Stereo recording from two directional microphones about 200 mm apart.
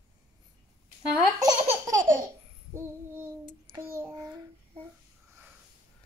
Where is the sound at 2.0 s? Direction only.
40° right (ahead or behind).